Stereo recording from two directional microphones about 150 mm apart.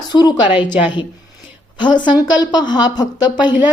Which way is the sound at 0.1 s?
30° left (ahead or behind).